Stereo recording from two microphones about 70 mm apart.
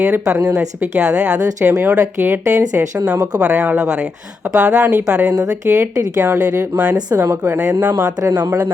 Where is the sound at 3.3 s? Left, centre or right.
Centre.